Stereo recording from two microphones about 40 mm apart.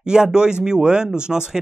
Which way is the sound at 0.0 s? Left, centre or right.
Centre.